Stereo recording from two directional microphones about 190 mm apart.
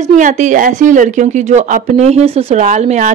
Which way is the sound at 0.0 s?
40° right (ahead or behind).